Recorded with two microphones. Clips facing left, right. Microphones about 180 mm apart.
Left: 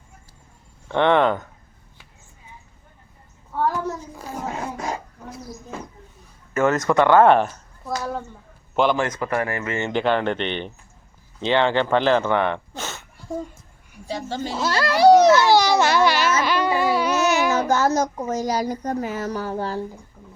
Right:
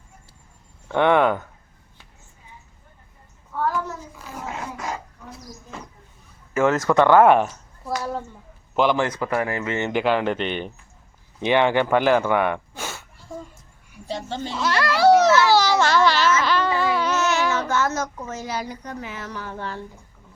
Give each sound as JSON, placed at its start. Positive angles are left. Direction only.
{"t": 0.9, "sound": "speech", "side_deg": -10}
{"t": 3.6, "sound": "hands", "side_deg": 35}
{"t": 6.5, "sound": "speech", "side_deg": -10}
{"t": 8.9, "sound": "speech", "side_deg": -15}
{"t": 10.0, "sound": "speech", "side_deg": -5}
{"t": 14.3, "sound": "speech", "side_deg": 5}
{"t": 14.6, "sound": "a sound", "side_deg": 25}
{"t": 17.7, "sound": "speech", "side_deg": 35}